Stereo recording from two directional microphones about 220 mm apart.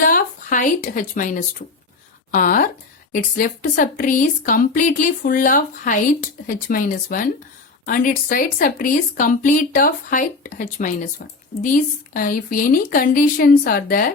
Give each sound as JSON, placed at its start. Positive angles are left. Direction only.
{"t": 0.0, "sound": "speech", "side_deg": 40}
{"t": 12.1, "sound": "speech", "side_deg": 40}